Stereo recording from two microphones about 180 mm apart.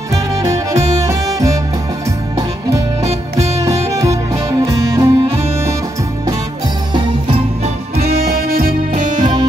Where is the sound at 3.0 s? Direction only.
35° right (ahead or behind).